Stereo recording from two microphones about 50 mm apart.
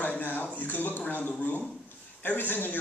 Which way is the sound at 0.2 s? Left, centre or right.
Left.